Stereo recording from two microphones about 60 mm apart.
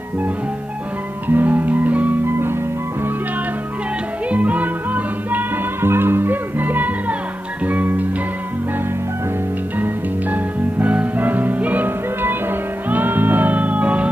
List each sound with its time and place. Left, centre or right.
1.3 s music: right
4.3 s music: right
5.8 s music: right
10.3 s music: right